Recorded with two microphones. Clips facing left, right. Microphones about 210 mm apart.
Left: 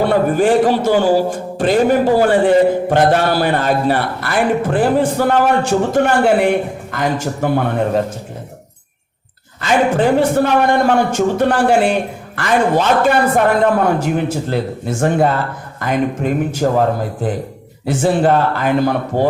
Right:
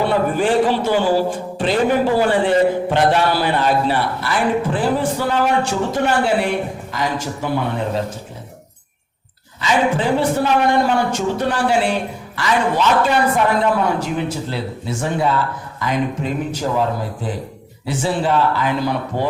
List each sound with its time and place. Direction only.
0.0 s a man's voice: 45° left (ahead or behind)
9.6 s a man's voice: 50° left (ahead or behind)